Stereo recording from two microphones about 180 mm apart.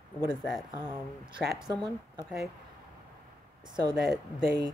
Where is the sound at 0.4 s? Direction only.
Centre (ahead or behind).